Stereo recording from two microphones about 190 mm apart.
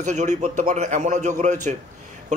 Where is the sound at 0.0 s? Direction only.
40° right (ahead or behind).